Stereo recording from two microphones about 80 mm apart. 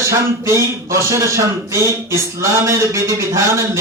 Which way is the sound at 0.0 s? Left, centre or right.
Right.